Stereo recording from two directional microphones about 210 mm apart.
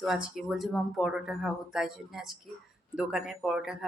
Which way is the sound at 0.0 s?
Centre (ahead or behind).